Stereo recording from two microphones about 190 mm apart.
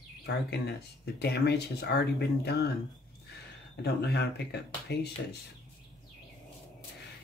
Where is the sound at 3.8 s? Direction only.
60° left (ahead or behind).